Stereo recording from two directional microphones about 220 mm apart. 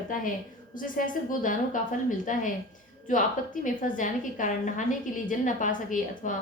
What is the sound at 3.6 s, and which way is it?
A woman's voice, 35° left (ahead or behind).